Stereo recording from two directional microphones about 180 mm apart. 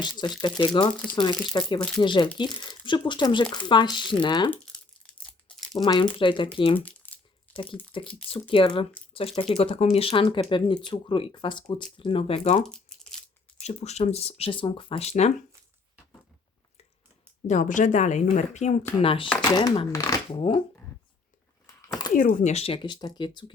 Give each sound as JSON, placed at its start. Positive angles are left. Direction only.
{"t": 0.4, "sound": "speech", "side_deg": 25}
{"t": 5.2, "sound": "crumpling", "side_deg": 5}
{"t": 5.7, "sound": "speech", "side_deg": 20}
{"t": 6.7, "sound": "crumpling", "side_deg": 10}
{"t": 7.9, "sound": "speech", "side_deg": 30}
{"t": 12.6, "sound": "tearing", "side_deg": 0}
{"t": 13.6, "sound": "speech", "side_deg": 40}
{"t": 17.4, "sound": "speech", "side_deg": 45}
{"t": 19.0, "sound": "speech", "side_deg": 30}
{"t": 20.5, "sound": "speech", "side_deg": 30}
{"t": 22.1, "sound": "speech", "side_deg": 50}